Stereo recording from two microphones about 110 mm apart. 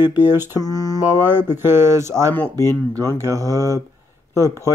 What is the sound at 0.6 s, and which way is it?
Mantra, 35° left (ahead or behind).